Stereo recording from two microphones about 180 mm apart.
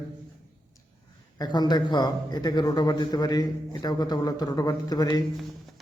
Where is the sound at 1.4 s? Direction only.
25° left (ahead or behind).